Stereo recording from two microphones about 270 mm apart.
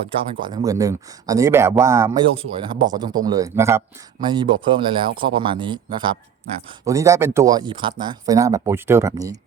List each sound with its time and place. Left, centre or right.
0.3 s speech: centre